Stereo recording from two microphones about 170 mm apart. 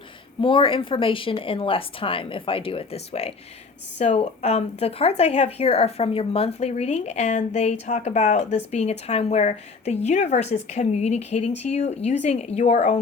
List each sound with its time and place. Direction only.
0.4 s speech: 30° left (ahead or behind)